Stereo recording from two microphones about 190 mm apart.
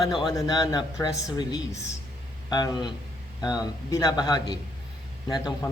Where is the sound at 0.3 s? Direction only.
20° left (ahead or behind).